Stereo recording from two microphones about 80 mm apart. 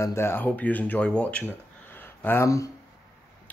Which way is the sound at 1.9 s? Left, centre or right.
Left.